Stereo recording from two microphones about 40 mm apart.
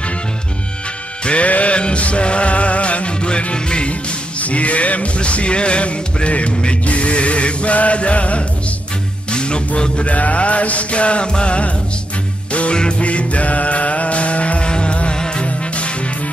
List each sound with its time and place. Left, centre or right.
1.2 s music: left
4.4 s music: left
10.1 s music: left
12.7 s music: left